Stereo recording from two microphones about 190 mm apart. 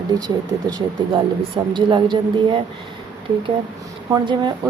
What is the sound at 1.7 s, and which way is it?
Speech, 25° right (ahead or behind).